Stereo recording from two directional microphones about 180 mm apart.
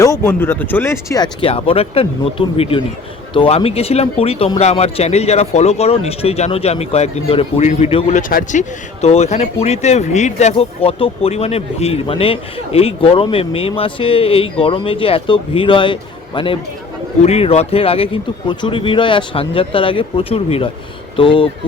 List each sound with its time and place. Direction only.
0.0 s speech: 15° left (ahead or behind); by 8.2 s 35° left (ahead or behind)
8.3 s speech: 55° left (ahead or behind)
9.0 s speech: 35° left (ahead or behind)